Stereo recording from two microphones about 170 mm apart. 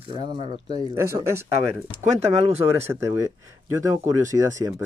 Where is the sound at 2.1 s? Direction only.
40° right (ahead or behind).